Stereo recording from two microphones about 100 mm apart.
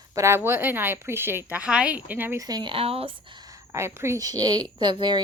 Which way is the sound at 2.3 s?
40° right (ahead or behind).